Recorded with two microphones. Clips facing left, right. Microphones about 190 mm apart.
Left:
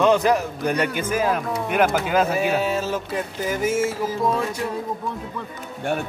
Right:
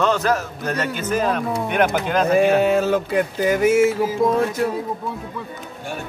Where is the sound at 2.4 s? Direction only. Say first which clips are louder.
Right 6 dB; 60° right (ahead or behind).